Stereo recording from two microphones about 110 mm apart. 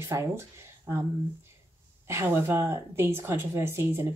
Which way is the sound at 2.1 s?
25° right (ahead or behind).